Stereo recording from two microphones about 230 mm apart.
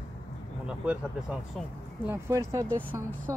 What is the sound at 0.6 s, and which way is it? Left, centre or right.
Speech, centre.